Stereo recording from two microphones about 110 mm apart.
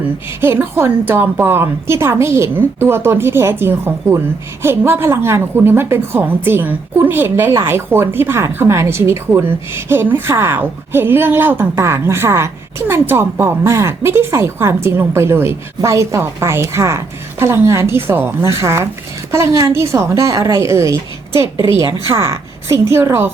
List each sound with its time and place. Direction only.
0.4 s speech: 25° right (ahead or behind)